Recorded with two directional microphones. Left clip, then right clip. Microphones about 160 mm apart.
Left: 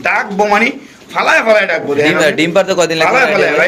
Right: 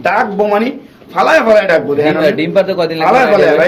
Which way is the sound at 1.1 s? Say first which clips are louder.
Right 1 dB; 40° right (ahead or behind).